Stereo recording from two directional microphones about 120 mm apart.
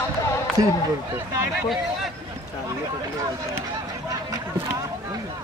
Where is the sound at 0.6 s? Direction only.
30° right (ahead or behind).